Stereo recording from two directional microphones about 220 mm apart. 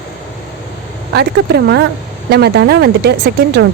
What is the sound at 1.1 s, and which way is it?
Speech, 50° right (ahead or behind).